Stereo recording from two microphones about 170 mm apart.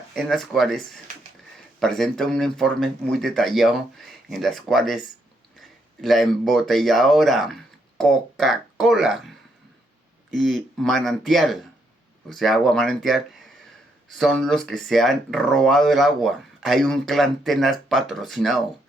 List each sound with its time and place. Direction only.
0.1 s speech: centre (ahead or behind)
10.3 s speech: centre (ahead or behind)